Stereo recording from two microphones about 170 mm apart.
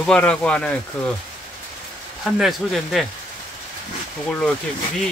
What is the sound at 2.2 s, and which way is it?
Speech, centre (ahead or behind).